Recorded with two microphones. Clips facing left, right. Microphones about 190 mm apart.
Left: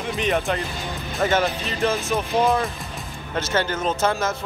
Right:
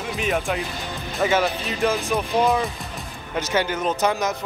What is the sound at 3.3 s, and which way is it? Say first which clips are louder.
Speech: even; 15° right (ahead or behind).